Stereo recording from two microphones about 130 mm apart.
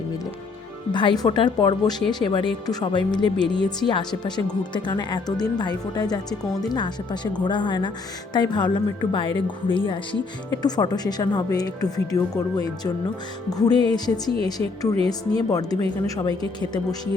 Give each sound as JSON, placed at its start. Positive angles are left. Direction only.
{"t": 0.9, "sound": "speech", "side_deg": 35}
{"t": 14.9, "sound": "speech", "side_deg": -45}
{"t": 15.5, "sound": "speech", "side_deg": 30}